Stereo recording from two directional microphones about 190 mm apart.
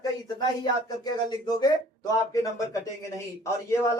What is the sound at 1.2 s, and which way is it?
A man's voice, 20° left (ahead or behind).